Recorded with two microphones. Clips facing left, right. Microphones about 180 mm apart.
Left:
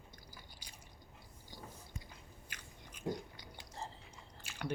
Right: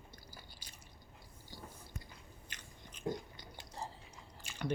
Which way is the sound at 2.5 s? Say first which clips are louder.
Left 1 dB; 10° left (ahead or behind).